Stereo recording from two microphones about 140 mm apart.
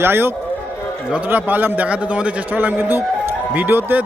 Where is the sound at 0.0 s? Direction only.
15° right (ahead or behind).